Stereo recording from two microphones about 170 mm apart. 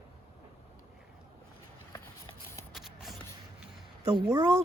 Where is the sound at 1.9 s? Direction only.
15° left (ahead or behind).